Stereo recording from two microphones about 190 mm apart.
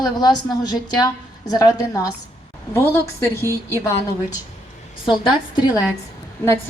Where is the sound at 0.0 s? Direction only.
20° left (ahead or behind).